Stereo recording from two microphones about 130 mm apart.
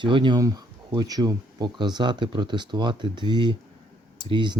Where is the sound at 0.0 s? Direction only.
40° right (ahead or behind).